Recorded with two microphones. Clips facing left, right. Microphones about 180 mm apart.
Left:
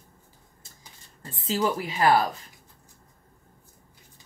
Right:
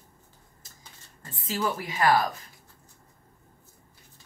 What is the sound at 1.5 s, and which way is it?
Speech, 25° left (ahead or behind).